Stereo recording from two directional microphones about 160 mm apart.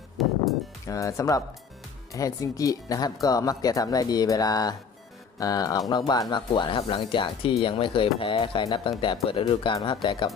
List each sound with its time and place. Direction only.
0.2 s music: centre (ahead or behind)
0.9 s speech: 20° left (ahead or behind)